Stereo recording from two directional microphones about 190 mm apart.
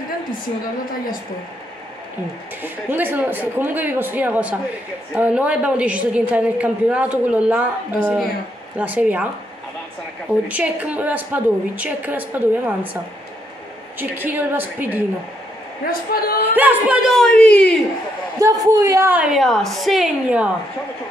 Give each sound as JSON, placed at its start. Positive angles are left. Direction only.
{"t": 2.6, "sound": "a woman's voice", "side_deg": -10}
{"t": 8.7, "sound": "a woman's voice", "side_deg": -10}
{"t": 10.5, "sound": "a woman's voice", "side_deg": -5}
{"t": 13.9, "sound": "a woman's voice", "side_deg": -10}
{"t": 15.9, "sound": "a woman's voice", "side_deg": 50}
{"t": 16.5, "sound": "a woman's voice", "side_deg": -5}
{"t": 18.4, "sound": "a woman's voice", "side_deg": -20}